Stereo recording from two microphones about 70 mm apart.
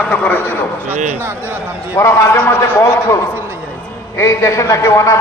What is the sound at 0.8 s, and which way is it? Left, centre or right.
A man's voice, right.